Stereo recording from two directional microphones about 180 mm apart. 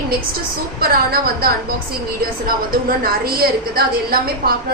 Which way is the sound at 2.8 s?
55° right (ahead or behind).